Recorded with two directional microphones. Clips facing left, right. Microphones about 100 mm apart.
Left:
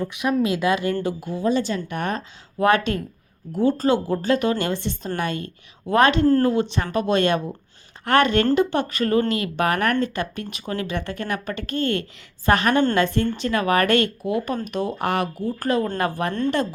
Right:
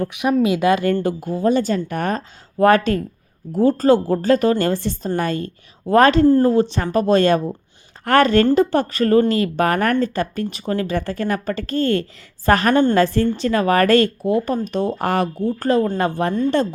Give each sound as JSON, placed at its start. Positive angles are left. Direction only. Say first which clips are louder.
{"t": 0.4, "sound": "speech", "louder": "right 5 dB", "side_deg": -60}